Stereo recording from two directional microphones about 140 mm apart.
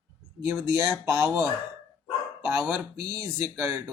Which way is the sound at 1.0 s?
20° right (ahead or behind).